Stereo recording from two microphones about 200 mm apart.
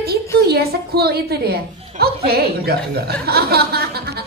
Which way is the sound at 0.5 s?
50° right (ahead or behind).